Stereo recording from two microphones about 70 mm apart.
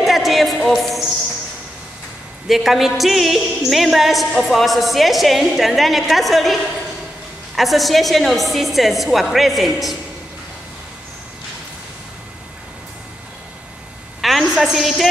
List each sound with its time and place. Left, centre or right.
0.0 s music: centre
2.4 s a woman's voice: centre
14.2 s a sound: centre